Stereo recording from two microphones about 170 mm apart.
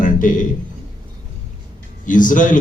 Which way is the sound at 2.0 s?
50° left (ahead or behind).